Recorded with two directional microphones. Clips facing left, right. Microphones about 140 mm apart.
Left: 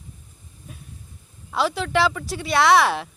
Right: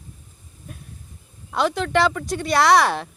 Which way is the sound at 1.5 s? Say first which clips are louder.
Right 2 dB; 5° left (ahead or behind).